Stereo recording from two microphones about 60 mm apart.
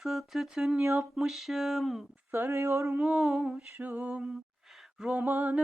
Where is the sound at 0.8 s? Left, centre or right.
Right.